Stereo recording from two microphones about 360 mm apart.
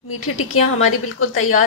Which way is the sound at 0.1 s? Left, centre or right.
Left.